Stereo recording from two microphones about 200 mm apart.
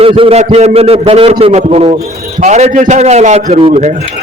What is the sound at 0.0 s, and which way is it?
A man's voice, 30° right (ahead or behind).